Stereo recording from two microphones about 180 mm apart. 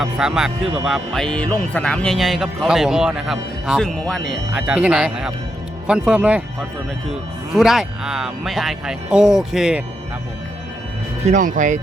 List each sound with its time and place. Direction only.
0.0 s speech: centre (ahead or behind)
4.5 s speech: 5° right (ahead or behind)
11.2 s speech: 40° right (ahead or behind)